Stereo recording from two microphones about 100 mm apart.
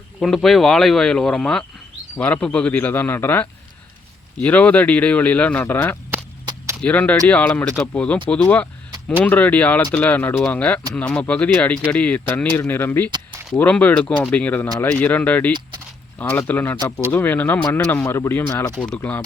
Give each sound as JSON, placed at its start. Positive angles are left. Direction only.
{"t": 0.2, "sound": "speech", "side_deg": 5}
{"t": 18.0, "sound": "speech", "side_deg": 25}